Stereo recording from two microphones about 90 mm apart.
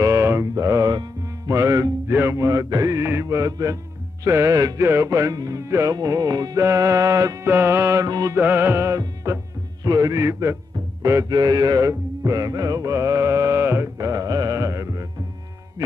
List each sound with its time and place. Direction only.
0.0 s mantra: 30° right (ahead or behind)
1.5 s music: 40° right (ahead or behind)
2.0 s music: 30° right (ahead or behind); by 6.6 s 45° right (ahead or behind)
6.6 s music: 35° right (ahead or behind)
8.4 s music: 20° right (ahead or behind)
11.2 s music: 45° right (ahead or behind); by 13.8 s 30° right (ahead or behind)
13.9 s music: 40° right (ahead or behind)